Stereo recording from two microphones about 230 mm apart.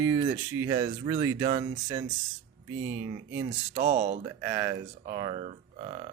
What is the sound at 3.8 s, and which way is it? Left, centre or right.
Speech, right.